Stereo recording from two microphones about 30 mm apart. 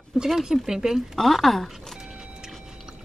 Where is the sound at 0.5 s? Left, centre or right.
Centre.